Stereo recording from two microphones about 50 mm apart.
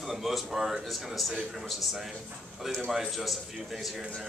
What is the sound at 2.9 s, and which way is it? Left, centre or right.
A man's voice, centre.